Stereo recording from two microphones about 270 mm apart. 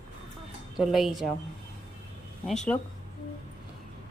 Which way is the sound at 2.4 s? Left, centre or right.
Centre.